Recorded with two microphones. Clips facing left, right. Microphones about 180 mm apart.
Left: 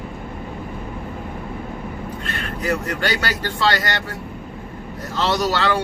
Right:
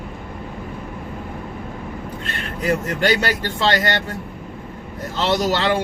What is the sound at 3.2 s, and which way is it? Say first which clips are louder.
Speech: right 1 dB; 20° right (ahead or behind).